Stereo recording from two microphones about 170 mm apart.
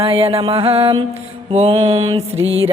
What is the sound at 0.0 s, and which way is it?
Music, 35° right (ahead or behind).